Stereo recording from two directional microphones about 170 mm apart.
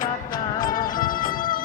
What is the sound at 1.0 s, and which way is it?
Music, 55° left (ahead or behind).